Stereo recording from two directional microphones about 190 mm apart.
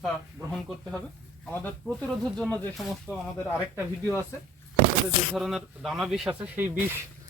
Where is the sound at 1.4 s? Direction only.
10° left (ahead or behind).